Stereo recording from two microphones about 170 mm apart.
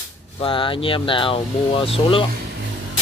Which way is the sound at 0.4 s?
30° left (ahead or behind).